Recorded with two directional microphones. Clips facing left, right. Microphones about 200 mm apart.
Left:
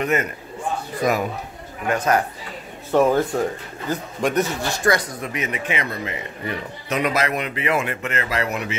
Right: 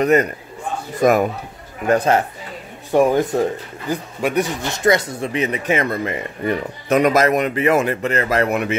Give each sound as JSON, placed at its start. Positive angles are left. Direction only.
{"t": 0.0, "sound": "a man's voice", "side_deg": -35}
{"t": 1.0, "sound": "speech", "side_deg": -50}
{"t": 1.9, "sound": "speech", "side_deg": -30}
{"t": 2.9, "sound": "speech", "side_deg": -15}
{"t": 5.7, "sound": "speech", "side_deg": -50}